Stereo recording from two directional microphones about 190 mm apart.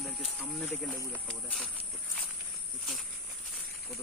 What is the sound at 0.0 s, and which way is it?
Speech, centre (ahead or behind).